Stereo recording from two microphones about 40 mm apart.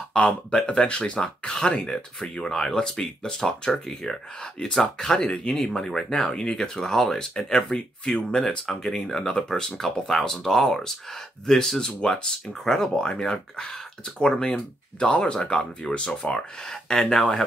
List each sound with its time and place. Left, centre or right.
0.1 s speech: left
2.5 s speech: centre
8.5 s speech: centre